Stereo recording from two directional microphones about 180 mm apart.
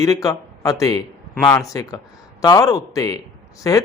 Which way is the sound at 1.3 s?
10° left (ahead or behind).